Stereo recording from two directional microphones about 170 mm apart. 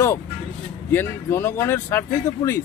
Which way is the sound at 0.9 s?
15° left (ahead or behind).